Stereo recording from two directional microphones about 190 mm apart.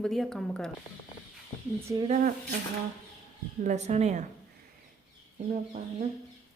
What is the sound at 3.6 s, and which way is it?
Speech, 35° right (ahead or behind).